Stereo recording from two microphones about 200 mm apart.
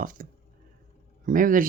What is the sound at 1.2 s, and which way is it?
Speech, 40° right (ahead or behind).